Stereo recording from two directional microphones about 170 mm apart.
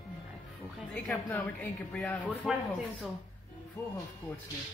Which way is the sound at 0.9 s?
10° left (ahead or behind).